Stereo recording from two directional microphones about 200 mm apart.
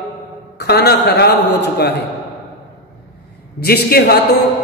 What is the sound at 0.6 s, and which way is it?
Speech, 55° left (ahead or behind).